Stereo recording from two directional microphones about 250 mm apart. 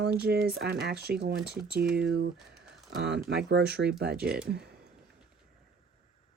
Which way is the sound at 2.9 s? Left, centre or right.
Right.